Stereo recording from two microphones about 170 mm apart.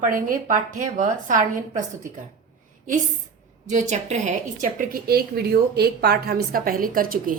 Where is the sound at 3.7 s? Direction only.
45° right (ahead or behind).